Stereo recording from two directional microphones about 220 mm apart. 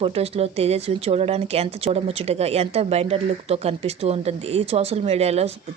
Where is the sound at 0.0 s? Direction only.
25° right (ahead or behind).